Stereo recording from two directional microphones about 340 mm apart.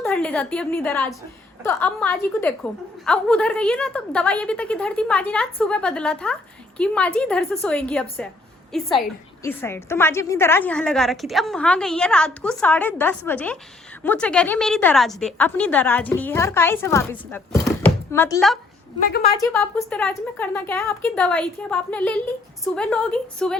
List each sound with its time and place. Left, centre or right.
0.0 s a woman's voice: centre
18.9 s a woman's voice: left
19.3 s a woman's voice: centre